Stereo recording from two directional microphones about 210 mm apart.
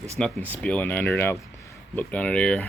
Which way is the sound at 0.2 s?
5° left (ahead or behind).